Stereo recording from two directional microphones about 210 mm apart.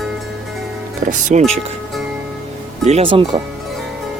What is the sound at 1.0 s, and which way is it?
Speech, 35° right (ahead or behind).